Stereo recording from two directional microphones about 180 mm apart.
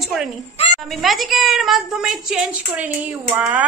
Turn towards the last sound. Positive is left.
turn(degrees=-10)  # may be behind; listen again after turning